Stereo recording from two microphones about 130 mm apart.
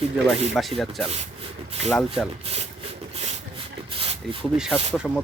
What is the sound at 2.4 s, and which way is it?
Speech, 50° right (ahead or behind).